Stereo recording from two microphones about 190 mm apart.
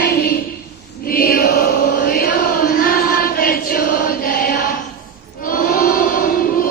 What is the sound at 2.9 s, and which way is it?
Choir, 50° left (ahead or behind).